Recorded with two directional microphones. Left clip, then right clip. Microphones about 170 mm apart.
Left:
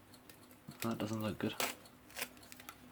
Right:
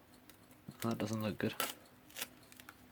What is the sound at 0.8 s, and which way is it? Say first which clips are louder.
Speech: right 1 dB; 55° right (ahead or behind).